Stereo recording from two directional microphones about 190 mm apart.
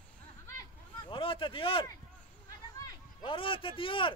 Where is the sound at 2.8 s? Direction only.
25° left (ahead or behind).